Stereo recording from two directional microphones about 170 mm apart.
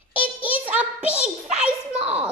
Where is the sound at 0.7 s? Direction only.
10° right (ahead or behind).